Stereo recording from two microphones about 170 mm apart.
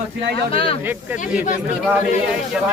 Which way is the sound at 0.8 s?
10° right (ahead or behind).